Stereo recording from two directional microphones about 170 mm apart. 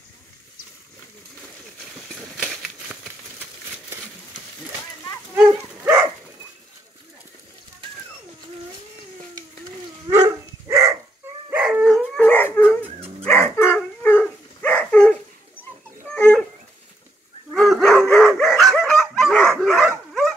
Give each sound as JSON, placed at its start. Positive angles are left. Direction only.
{"t": 2.3, "sound": "a sound", "side_deg": 0}
{"t": 10.0, "sound": "dog", "side_deg": -20}
{"t": 11.5, "sound": "dog", "side_deg": -5}
{"t": 16.2, "sound": "dog", "side_deg": 5}
{"t": 17.5, "sound": "dog", "side_deg": 0}
{"t": 18.0, "sound": "bow-wow", "side_deg": 5}